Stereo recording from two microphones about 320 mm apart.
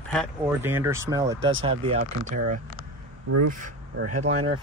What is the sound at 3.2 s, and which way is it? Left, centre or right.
Speech, right.